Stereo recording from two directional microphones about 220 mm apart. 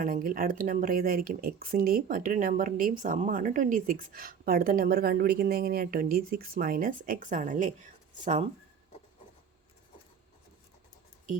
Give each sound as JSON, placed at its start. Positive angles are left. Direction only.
{"t": 0.0, "sound": "speech", "side_deg": -40}